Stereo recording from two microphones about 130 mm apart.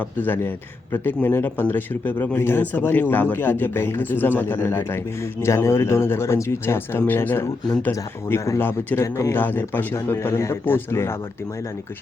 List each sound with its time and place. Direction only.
0.0 s speech: 15° left (ahead or behind)